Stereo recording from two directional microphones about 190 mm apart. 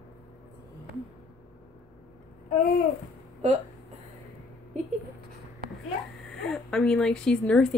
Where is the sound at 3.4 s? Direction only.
35° right (ahead or behind).